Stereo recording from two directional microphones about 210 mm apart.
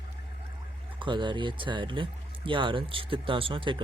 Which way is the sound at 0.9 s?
25° right (ahead or behind).